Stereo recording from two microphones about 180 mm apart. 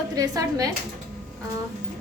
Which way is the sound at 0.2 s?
20° right (ahead or behind).